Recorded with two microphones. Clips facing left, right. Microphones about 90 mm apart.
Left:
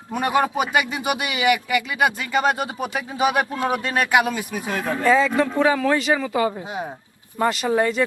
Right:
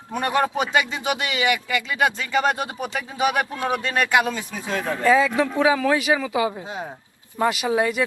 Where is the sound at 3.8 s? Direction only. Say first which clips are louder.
Even; 15° left (ahead or behind).